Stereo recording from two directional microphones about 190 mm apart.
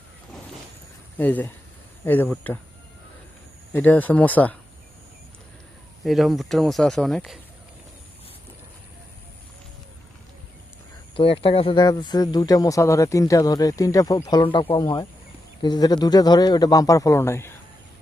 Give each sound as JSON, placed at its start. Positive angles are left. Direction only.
{"t": 1.2, "sound": "speech", "side_deg": 10}
{"t": 3.7, "sound": "speech", "side_deg": 10}
{"t": 6.0, "sound": "speech", "side_deg": 0}
{"t": 11.2, "sound": "speech", "side_deg": 30}